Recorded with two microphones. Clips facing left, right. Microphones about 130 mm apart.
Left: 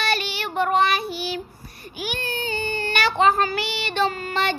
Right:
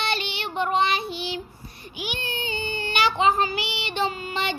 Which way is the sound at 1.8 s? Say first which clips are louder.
Left 3 dB; 20° right (ahead or behind).